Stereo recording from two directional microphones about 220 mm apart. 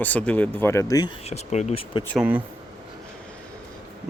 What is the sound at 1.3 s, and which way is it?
Speech, 30° left (ahead or behind).